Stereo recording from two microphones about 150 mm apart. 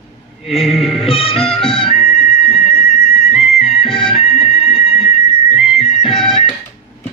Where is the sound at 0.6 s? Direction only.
Centre (ahead or behind).